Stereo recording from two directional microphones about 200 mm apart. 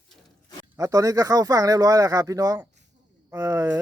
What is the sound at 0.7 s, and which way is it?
Speech, 15° right (ahead or behind).